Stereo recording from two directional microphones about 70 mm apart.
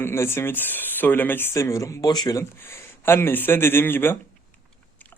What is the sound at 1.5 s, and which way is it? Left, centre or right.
Speech, left.